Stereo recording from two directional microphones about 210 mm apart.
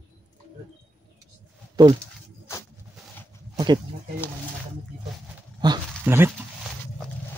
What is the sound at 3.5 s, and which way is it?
Goat, 20° right (ahead or behind).